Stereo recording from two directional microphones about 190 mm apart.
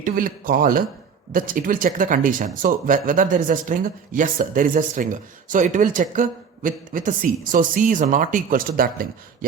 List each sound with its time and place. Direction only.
0.0 s speech: 45° right (ahead or behind)